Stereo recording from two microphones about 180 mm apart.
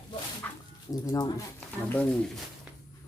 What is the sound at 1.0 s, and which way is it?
Speech, 20° left (ahead or behind).